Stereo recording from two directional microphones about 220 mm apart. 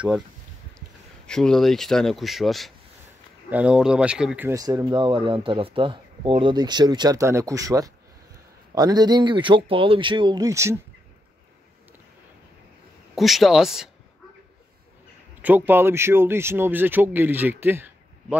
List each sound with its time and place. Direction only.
0.7 s speech: 5° left (ahead or behind); by 10.8 s 15° right (ahead or behind)
13.1 s speech: centre (ahead or behind)
15.4 s speech: 10° right (ahead or behind)